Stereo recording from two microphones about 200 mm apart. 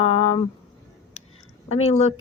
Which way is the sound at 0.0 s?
30° left (ahead or behind).